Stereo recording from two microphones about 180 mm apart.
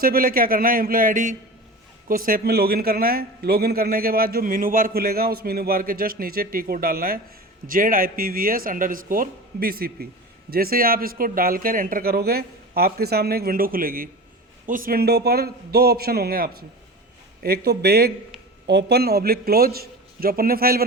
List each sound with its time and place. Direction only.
0.0 s a man's voice: 55° right (ahead or behind)